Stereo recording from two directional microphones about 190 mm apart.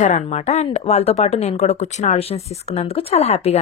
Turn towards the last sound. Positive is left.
turn(degrees=35)  # may be behind; listen again after turning